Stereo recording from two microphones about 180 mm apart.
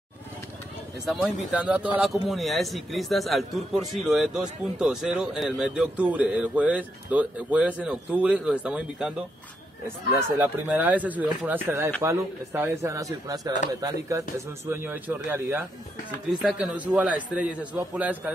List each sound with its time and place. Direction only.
1.0 s a man's voice: 5° right (ahead or behind)